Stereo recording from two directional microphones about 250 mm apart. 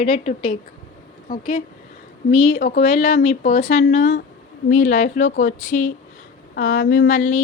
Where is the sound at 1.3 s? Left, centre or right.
Left.